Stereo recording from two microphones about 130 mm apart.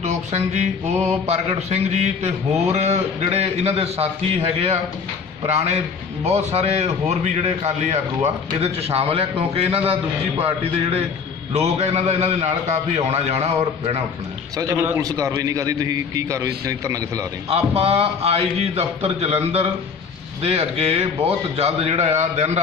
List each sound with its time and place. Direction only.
0.0 s a sound: 60° right (ahead or behind)
1.2 s a man's voice: 55° right (ahead or behind)
14.6 s a man's voice: 20° right (ahead or behind)
17.5 s a man's voice: 50° right (ahead or behind)
20.4 s a man's voice: 50° right (ahead or behind)